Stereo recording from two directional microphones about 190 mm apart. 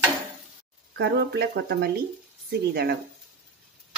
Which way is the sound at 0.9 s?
60° right (ahead or behind).